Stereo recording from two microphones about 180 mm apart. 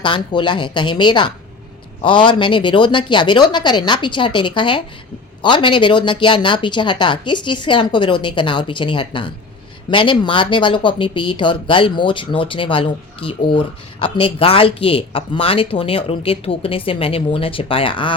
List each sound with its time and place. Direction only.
0.0 s speech: 25° left (ahead or behind)